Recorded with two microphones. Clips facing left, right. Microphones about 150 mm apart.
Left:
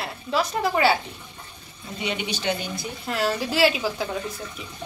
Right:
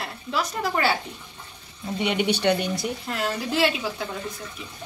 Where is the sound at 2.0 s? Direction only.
60° right (ahead or behind).